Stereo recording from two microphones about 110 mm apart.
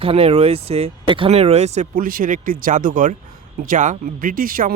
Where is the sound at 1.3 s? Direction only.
70° right (ahead or behind); by 2.3 s 90° right.